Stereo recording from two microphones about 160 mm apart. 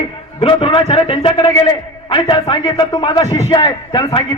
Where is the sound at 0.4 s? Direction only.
35° left (ahead or behind).